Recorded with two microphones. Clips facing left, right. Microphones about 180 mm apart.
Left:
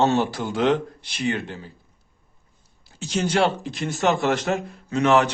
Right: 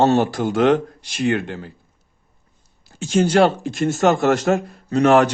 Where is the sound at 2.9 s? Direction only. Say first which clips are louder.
Right 6 dB; 50° right (ahead or behind).